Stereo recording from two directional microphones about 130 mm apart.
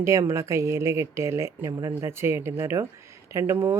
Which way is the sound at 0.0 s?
20° right (ahead or behind).